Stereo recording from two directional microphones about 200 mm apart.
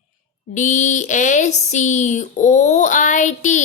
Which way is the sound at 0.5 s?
40° left (ahead or behind).